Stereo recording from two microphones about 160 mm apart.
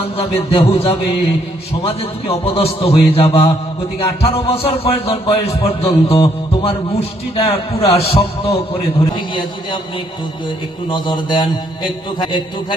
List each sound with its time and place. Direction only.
0.0 s a man's voice: 40° left (ahead or behind)
10.8 s a man's voice: 25° left (ahead or behind)